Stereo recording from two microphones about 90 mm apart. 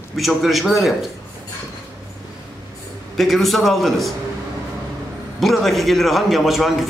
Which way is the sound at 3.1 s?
Centre (ahead or behind).